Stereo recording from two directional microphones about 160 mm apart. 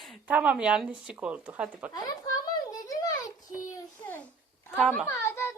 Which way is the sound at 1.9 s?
25° left (ahead or behind).